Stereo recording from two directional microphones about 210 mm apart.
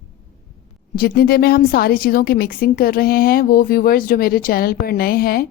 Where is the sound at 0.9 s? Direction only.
45° left (ahead or behind).